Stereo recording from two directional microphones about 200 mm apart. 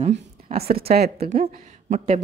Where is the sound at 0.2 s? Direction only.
50° right (ahead or behind).